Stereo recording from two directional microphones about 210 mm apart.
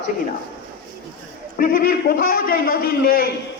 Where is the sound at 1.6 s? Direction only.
40° left (ahead or behind).